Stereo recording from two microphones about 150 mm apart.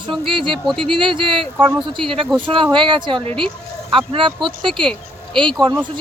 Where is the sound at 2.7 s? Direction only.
35° right (ahead or behind).